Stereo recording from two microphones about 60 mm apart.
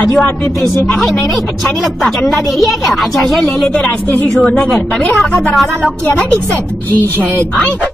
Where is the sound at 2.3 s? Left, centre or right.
Centre.